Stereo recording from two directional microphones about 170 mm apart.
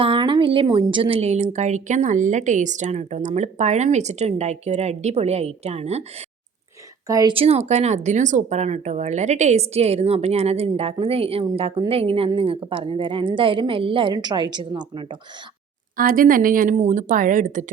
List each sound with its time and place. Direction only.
0.0 s speech: 30° right (ahead or behind)
7.1 s a woman's voice: 20° right (ahead or behind)
7.3 s speech: 35° right (ahead or behind)
16.0 s speech: 55° right (ahead or behind)